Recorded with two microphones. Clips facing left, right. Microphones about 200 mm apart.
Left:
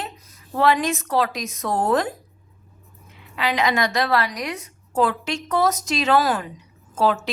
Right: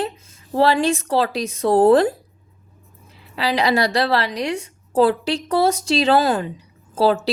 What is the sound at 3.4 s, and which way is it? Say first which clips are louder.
A woman's voice: right 3 dB; 35° right (ahead or behind).